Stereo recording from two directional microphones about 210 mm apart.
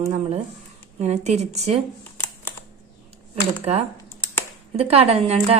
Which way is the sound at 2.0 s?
10° left (ahead or behind).